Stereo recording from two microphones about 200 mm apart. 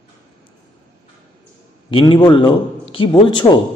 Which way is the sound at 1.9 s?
25° left (ahead or behind).